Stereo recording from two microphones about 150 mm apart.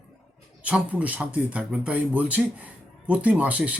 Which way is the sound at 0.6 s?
10° right (ahead or behind).